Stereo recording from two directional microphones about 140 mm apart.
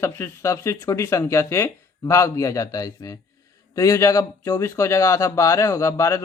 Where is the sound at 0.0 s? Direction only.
15° left (ahead or behind).